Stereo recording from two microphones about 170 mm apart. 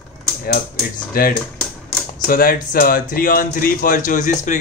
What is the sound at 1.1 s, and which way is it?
Speech, 60° left (ahead or behind).